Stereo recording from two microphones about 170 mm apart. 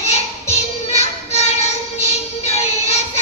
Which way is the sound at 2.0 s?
40° left (ahead or behind).